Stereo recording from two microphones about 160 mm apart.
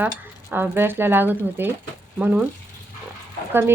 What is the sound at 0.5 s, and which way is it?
Speech, 15° right (ahead or behind).